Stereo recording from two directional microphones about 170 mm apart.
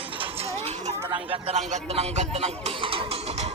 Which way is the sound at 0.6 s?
40° right (ahead or behind).